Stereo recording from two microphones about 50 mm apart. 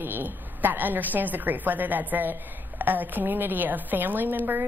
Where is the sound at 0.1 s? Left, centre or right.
Right.